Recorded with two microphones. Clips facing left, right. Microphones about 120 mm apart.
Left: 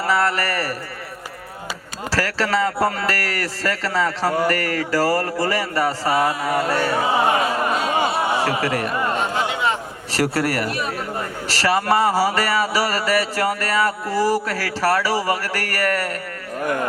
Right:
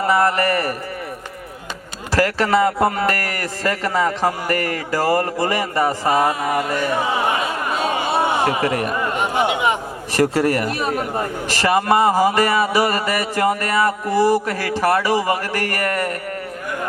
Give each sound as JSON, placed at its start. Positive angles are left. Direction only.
{"t": 0.0, "sound": "a man's voice", "side_deg": -20}
{"t": 2.1, "sound": "a man's voice", "side_deg": -20}
{"t": 8.1, "sound": "a sound", "side_deg": -20}
{"t": 10.7, "sound": "speech", "side_deg": -35}
{"t": 11.4, "sound": "a man's voice", "side_deg": -20}